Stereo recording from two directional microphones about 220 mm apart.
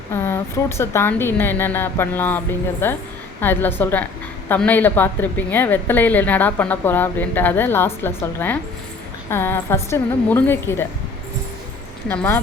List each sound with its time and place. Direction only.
0.1 s a woman's voice: 10° left (ahead or behind)
12.0 s a woman's voice: 10° left (ahead or behind)